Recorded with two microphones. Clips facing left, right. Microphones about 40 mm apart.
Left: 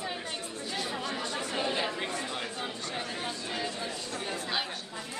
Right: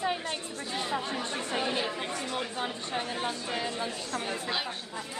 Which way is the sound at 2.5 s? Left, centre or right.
Centre.